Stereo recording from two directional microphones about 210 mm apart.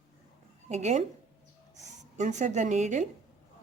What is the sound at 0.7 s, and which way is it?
Speech, 35° right (ahead or behind).